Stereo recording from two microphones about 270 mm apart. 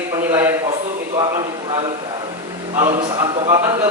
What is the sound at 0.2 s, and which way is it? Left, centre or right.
Speech, centre.